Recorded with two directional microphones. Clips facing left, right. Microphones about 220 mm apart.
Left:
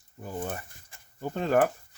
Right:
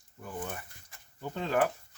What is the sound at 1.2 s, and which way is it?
Speech, 45° left (ahead or behind).